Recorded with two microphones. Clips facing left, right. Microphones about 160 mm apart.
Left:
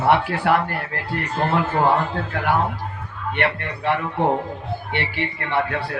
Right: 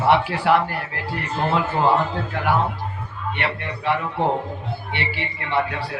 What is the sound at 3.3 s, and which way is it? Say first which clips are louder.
A man's voice: left 5 dB; 55° left (ahead or behind).